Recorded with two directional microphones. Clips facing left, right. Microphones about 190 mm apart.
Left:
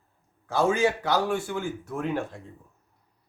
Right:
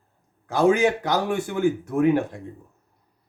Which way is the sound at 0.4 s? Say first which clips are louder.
Right 4 dB; 15° right (ahead or behind).